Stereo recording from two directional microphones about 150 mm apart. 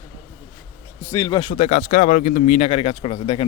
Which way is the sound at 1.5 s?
50° left (ahead or behind).